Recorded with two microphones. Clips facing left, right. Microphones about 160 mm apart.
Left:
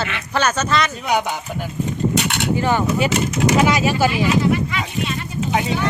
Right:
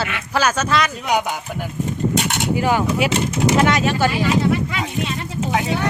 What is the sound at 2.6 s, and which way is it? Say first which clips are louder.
Speech: even; 5° right (ahead or behind).